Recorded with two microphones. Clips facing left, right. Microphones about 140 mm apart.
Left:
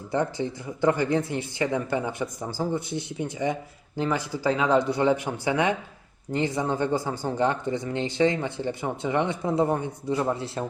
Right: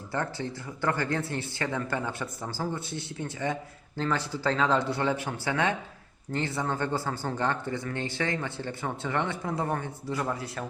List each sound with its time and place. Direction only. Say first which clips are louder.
0.1 s speech: left 6 dB; 15° left (ahead or behind)